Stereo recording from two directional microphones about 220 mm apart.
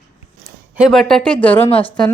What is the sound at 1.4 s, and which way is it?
Speech, 10° left (ahead or behind).